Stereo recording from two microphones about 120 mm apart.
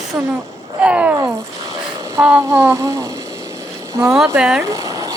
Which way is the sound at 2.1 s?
20° right (ahead or behind).